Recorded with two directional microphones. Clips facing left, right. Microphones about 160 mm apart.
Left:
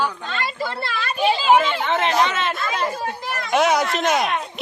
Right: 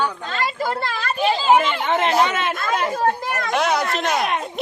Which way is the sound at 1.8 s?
10° right (ahead or behind).